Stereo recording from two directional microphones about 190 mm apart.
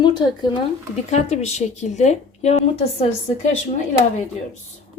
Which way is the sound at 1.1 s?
35° left (ahead or behind).